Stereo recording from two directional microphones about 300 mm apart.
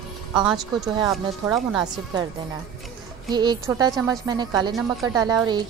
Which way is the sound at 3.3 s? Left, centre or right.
Centre.